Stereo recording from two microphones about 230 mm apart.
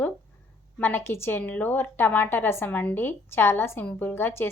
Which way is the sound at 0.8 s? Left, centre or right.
Centre.